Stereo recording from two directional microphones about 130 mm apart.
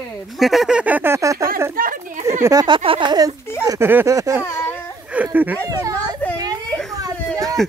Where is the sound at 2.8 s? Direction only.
40° right (ahead or behind).